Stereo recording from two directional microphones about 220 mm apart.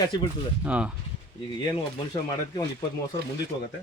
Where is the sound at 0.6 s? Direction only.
5° right (ahead or behind).